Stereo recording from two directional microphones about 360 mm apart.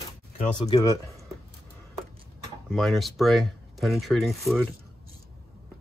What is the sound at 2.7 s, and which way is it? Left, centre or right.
Speech, centre.